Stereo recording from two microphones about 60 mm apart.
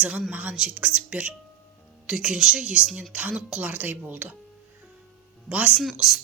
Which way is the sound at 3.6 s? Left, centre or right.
Right.